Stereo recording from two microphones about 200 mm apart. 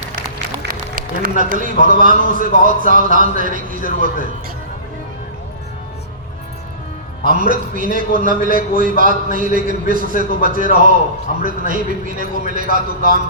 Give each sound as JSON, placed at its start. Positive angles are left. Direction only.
{"t": 0.3, "sound": "a man's voice", "side_deg": -45}
{"t": 7.3, "sound": "a man's voice", "side_deg": -40}